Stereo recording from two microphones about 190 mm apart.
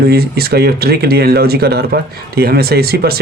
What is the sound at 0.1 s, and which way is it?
Speech, 55° right (ahead or behind).